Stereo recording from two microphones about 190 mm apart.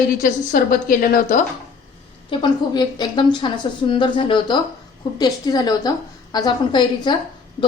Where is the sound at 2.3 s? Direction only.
25° left (ahead or behind).